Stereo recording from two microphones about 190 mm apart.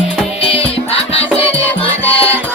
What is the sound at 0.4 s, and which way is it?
Music, 30° left (ahead or behind).